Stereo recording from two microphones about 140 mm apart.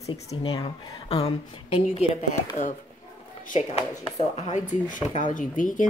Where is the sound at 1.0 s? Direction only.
45° left (ahead or behind).